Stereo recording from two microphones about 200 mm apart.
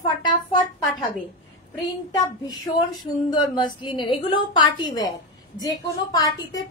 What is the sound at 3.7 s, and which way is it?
A woman's voice, 25° left (ahead or behind).